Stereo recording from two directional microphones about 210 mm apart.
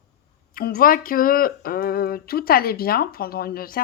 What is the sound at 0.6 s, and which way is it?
Speech, 45° left (ahead or behind).